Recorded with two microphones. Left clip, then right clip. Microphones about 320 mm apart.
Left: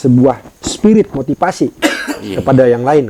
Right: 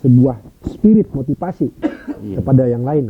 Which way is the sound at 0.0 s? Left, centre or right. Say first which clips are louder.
Left 5 dB; centre.